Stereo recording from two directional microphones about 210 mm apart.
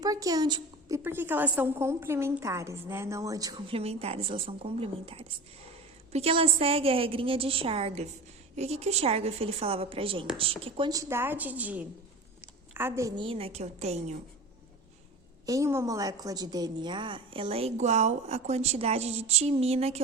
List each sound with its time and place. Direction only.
0.0 s a woman's voice: 15° right (ahead or behind); by 14.2 s 30° right (ahead or behind)
15.4 s a woman's voice: 15° right (ahead or behind); by 20.0 s 30° right (ahead or behind)